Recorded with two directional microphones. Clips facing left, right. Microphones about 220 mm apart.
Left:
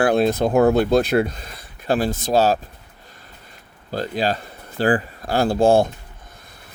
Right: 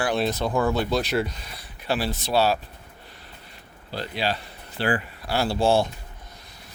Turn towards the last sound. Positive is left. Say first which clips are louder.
# left 6 dB
turn(degrees=50)  # may be behind; listen again after turning